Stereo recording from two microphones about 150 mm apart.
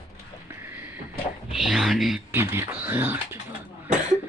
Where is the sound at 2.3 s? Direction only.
15° right (ahead or behind).